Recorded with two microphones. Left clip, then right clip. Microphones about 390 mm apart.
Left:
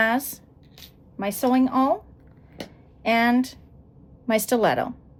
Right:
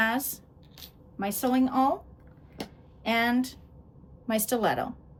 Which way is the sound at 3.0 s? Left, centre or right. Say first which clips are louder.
Left 6 dB; centre.